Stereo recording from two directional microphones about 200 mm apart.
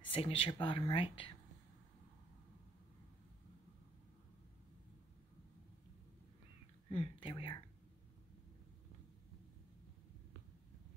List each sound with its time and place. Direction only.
0.1 s speech: 30° left (ahead or behind)
6.9 s speech: 25° left (ahead or behind)